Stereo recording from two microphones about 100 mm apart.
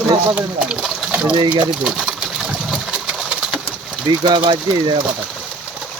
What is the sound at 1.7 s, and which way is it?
Pigeon, 10° right (ahead or behind).